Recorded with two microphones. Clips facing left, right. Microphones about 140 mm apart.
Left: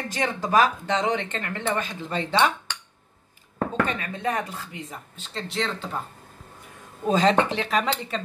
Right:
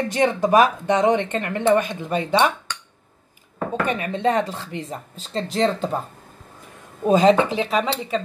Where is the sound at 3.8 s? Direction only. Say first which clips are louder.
Right 6 dB; 15° right (ahead or behind); by 6.0 s 40° right (ahead or behind).